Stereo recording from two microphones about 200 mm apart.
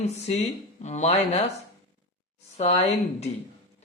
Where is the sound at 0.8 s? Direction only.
35° left (ahead or behind).